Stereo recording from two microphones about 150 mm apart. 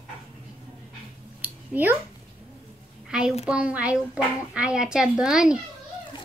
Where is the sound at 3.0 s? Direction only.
5° right (ahead or behind).